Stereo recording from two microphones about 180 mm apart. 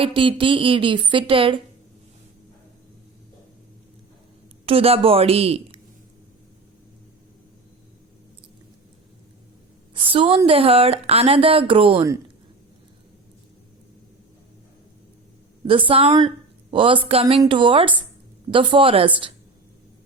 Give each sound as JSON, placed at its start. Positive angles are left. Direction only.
{"t": 0.0, "sound": "a woman's voice", "side_deg": -30}
{"t": 4.6, "sound": "a woman's voice", "side_deg": -30}
{"t": 9.9, "sound": "a woman's voice", "side_deg": -30}
{"t": 15.6, "sound": "a woman's voice", "side_deg": -30}